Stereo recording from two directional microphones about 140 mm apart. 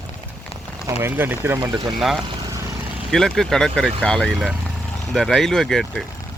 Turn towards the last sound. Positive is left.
turn(degrees=0)  # may be behind; listen again after turning